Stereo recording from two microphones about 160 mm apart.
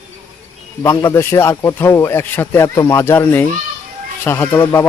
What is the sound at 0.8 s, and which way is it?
Speech, 20° left (ahead or behind).